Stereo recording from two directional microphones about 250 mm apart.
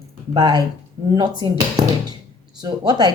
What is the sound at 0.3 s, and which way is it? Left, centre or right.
Speech, centre.